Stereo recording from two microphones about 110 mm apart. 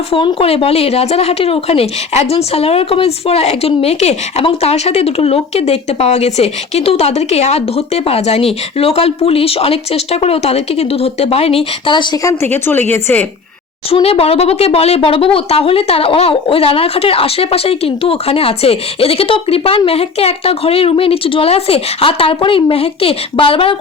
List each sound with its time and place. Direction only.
0.1 s a woman's voice: 50° left (ahead or behind)
11.9 s speech: 45° left (ahead or behind)
12.2 s a woman's voice: 30° left (ahead or behind)
12.5 s a woman's voice: 15° left (ahead or behind)
13.9 s a woman's voice: 60° left (ahead or behind)